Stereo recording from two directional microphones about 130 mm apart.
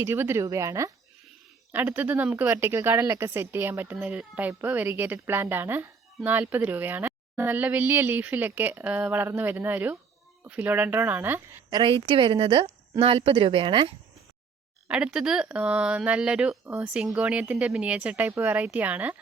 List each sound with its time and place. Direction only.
0.0 s speech: 20° right (ahead or behind)
11.7 s a woman's voice: 40° right (ahead or behind)
14.8 s speech: 10° right (ahead or behind)